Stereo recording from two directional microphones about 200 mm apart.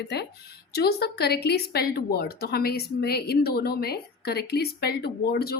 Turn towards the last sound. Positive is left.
turn(degrees=50)  # may be behind; listen again after turning